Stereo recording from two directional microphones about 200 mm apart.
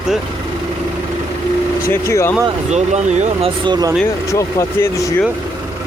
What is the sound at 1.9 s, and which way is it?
Speech, 15° left (ahead or behind).